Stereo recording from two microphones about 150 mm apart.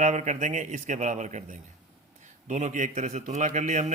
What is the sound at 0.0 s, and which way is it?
A man's voice, 50° right (ahead or behind).